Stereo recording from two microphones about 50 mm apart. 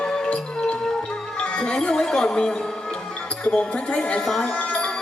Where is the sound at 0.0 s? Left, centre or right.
Left.